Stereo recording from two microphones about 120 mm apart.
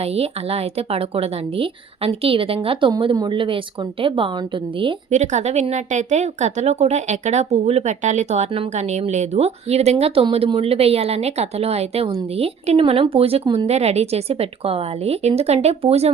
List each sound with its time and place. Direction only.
0.0 s speech: 55° right (ahead or behind)
5.1 s speech: 75° right (ahead or behind); by 13.7 s 45° right (ahead or behind)
13.7 s speech: 60° right (ahead or behind)